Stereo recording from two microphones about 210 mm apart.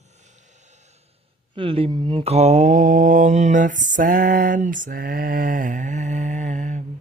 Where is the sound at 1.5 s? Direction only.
25° right (ahead or behind).